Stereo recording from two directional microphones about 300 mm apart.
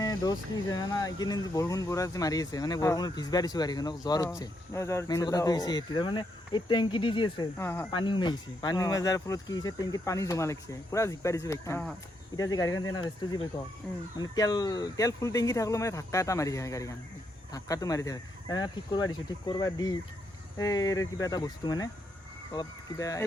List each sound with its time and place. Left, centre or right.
0.0 s speech: centre